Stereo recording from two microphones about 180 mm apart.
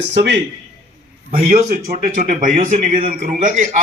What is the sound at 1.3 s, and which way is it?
A man's voice, 45° right (ahead or behind).